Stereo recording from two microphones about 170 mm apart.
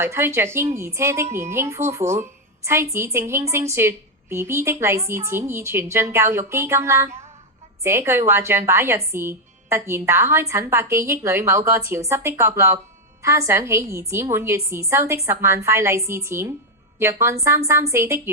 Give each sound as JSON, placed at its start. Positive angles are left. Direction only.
{"t": 0.0, "sound": "a woman's voice", "side_deg": -15}